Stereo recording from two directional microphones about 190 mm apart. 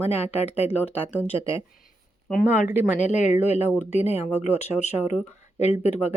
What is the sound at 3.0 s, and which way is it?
Speech, 40° left (ahead or behind).